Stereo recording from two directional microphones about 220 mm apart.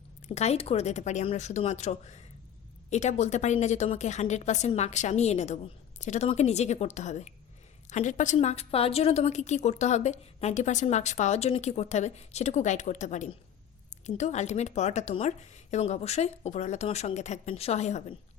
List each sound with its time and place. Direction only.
0.3 s a woman's voice: 30° left (ahead or behind)